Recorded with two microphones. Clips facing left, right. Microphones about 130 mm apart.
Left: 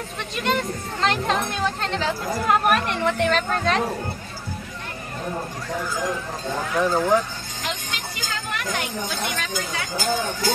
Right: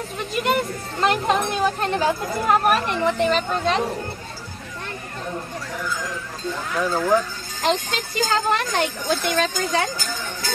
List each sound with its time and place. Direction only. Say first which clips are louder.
0.2 s speech: right 2 dB; 5° right (ahead or behind)
2.5 s a woman's voice: right 1 dB; centre (ahead or behind)
6.8 s speech: even; 20° left (ahead or behind)
7.6 s speech: right 9 dB; 35° right (ahead or behind)